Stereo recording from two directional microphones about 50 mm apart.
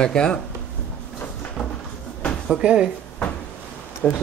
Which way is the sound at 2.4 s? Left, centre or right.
Centre.